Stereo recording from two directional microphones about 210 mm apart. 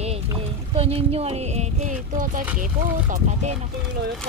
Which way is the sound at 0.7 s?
30° right (ahead or behind).